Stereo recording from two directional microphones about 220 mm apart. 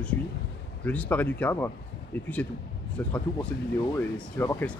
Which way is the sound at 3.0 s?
5° left (ahead or behind).